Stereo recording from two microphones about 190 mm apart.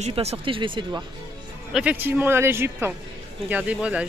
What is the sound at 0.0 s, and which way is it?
Speech, 35° right (ahead or behind).